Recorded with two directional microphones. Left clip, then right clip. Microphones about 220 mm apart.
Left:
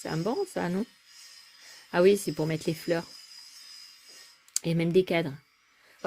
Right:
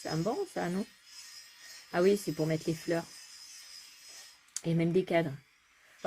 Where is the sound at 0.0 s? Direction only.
45° left (ahead or behind).